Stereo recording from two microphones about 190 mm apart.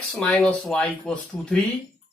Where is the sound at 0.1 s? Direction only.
5° left (ahead or behind).